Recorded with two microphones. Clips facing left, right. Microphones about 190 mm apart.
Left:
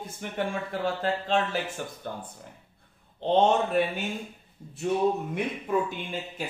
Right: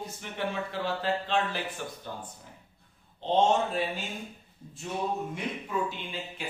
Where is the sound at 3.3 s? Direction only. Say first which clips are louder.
Left 3 dB; 60° left (ahead or behind).